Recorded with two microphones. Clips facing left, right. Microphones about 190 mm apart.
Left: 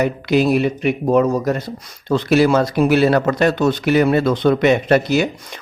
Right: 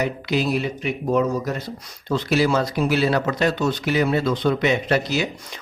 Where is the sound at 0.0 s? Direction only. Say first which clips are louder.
Left 6 dB; 60° left (ahead or behind).